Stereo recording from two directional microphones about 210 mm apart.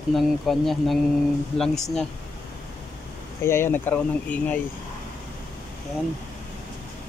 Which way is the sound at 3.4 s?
10° left (ahead or behind).